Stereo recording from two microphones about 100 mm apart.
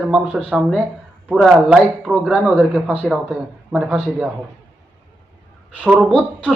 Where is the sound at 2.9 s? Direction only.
5° right (ahead or behind).